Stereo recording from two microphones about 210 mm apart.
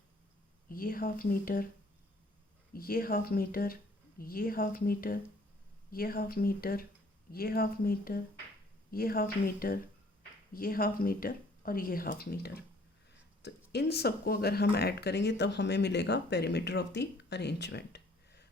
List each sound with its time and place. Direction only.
0.7 s speech: 45° left (ahead or behind)
2.7 s speech: 45° left (ahead or behind)
13.7 s speech: 50° left (ahead or behind)